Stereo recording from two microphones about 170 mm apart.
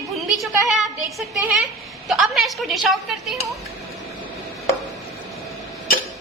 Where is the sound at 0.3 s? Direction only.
Centre (ahead or behind).